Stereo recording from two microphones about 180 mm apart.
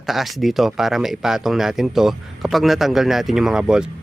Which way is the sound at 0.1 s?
Centre (ahead or behind).